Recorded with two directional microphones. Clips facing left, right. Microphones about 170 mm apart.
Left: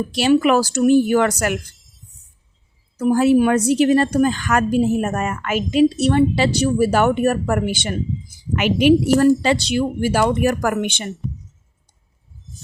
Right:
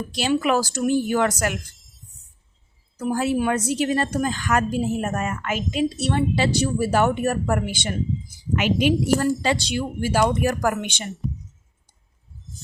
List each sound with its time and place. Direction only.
0.1 s a woman's voice: 70° left (ahead or behind)
3.0 s a woman's voice: 70° left (ahead or behind)
8.5 s a woman's voice: 65° left (ahead or behind)